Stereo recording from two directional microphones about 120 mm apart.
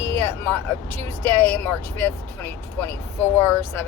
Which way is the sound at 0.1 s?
20° left (ahead or behind).